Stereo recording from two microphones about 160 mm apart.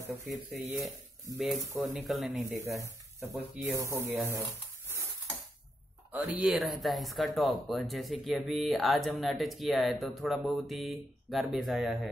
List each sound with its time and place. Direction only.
0.1 s speech: centre (ahead or behind)
2.4 s speech: 20° right (ahead or behind)
6.1 s speech: centre (ahead or behind)